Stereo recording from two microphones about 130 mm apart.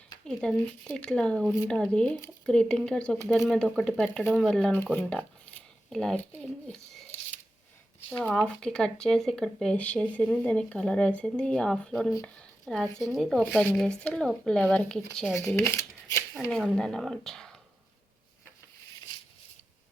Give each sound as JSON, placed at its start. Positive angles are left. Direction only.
{"t": 0.3, "sound": "speech", "side_deg": 5}
{"t": 8.1, "sound": "speech", "side_deg": 10}
{"t": 15.3, "sound": "speech", "side_deg": 20}
{"t": 16.5, "sound": "speech", "side_deg": 5}